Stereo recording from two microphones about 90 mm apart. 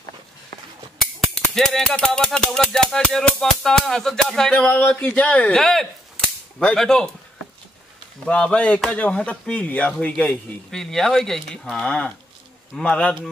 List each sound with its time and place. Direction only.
1.3 s speech: 5° left (ahead or behind)
5.6 s whip: 5° left (ahead or behind)
8.3 s speech: 10° left (ahead or behind)